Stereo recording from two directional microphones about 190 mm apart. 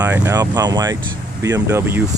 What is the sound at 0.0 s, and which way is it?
Speech, 15° right (ahead or behind).